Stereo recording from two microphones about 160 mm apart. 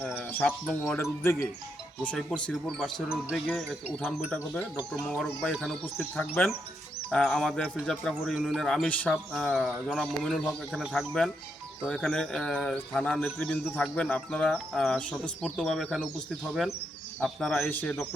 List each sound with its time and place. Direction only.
0.0 s a sound: 5° right (ahead or behind)
0.3 s speech: 10° left (ahead or behind)
1.2 s speech: 15° left (ahead or behind); by 4.3 s 5° right (ahead or behind)
4.9 s speech: 5° left (ahead or behind)
6.1 s speech: 10° left (ahead or behind)
17.2 s speech: centre (ahead or behind)